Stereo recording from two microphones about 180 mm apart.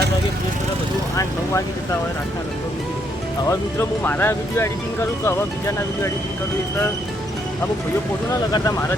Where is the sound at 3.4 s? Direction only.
10° left (ahead or behind).